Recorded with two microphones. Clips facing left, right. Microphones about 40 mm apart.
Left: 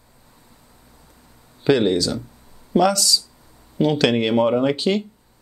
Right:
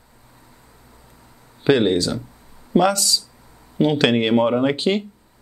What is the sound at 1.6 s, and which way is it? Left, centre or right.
Speech, right.